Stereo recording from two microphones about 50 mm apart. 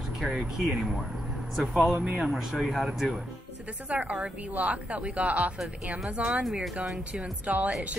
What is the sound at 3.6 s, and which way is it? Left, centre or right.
Speech, right.